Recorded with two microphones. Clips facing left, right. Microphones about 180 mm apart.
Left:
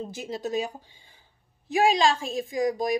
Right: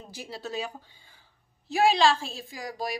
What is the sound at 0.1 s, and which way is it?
Speech, 20° left (ahead or behind).